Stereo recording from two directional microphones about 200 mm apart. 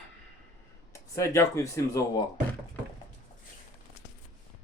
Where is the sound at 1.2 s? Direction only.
15° left (ahead or behind).